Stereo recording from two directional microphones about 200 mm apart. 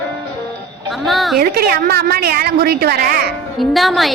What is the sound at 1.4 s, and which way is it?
A woman's voice, 50° right (ahead or behind).